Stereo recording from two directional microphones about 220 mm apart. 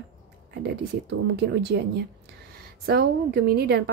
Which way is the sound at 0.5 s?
50° right (ahead or behind).